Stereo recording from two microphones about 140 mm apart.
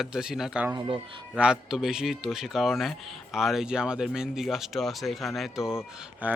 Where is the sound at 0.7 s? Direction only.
40° right (ahead or behind).